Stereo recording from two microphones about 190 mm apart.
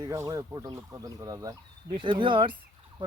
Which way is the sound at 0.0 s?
20° right (ahead or behind).